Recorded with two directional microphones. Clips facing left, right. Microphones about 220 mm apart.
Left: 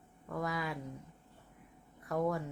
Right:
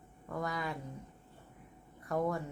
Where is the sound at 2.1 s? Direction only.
Centre (ahead or behind).